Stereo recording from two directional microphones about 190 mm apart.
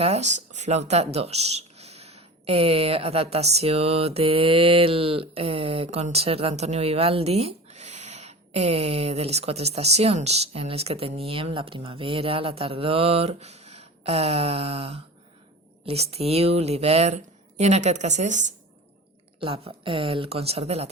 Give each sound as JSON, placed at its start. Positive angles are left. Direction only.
{"t": 0.0, "sound": "speech", "side_deg": -35}
{"t": 19.4, "sound": "speech", "side_deg": -30}